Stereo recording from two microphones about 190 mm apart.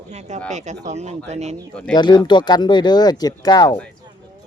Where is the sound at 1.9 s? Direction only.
25° left (ahead or behind).